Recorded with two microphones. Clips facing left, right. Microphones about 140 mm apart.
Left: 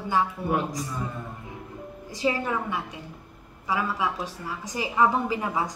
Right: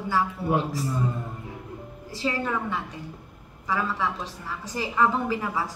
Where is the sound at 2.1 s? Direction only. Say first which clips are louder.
Left 1 dB; 15° left (ahead or behind).